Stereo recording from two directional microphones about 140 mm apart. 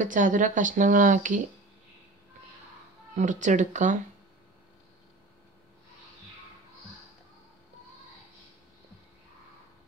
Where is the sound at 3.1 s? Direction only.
60° right (ahead or behind).